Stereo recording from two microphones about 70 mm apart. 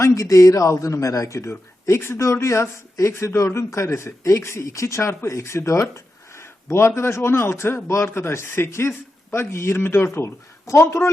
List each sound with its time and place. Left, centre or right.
0.0 s a man's voice: left